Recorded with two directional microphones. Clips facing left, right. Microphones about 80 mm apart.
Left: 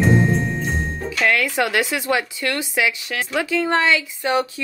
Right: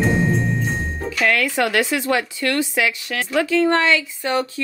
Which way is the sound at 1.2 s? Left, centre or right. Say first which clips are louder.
Even; centre.